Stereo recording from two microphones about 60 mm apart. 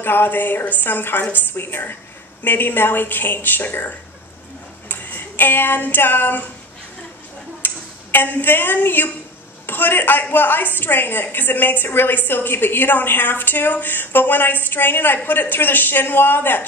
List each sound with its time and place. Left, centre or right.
0.0 s a woman's voice: left
4.8 s a sound: left
7.6 s a man's voice: left